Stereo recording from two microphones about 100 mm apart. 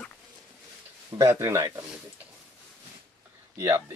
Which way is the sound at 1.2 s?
25° right (ahead or behind).